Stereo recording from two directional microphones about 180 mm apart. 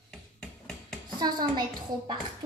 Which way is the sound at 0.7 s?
Centre (ahead or behind).